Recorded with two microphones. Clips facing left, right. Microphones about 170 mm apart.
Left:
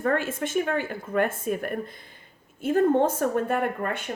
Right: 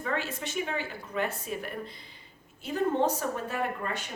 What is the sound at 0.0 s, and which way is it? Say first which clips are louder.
A woman's voice: left 7 dB; 50° left (ahead or behind).